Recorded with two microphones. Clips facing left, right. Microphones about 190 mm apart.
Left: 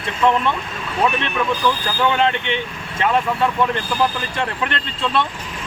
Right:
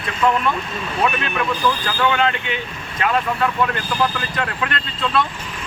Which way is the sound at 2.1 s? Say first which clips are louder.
Left 2 dB; 25° left (ahead or behind).